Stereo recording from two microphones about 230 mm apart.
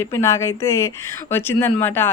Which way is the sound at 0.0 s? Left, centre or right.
Centre.